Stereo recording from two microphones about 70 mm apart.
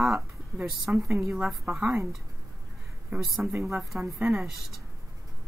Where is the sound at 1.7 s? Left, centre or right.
Centre.